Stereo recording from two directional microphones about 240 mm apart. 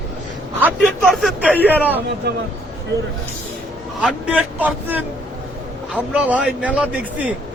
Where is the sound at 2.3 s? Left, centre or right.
Right.